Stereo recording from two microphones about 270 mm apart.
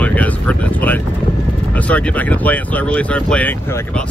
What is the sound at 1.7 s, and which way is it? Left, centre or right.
Speech, centre.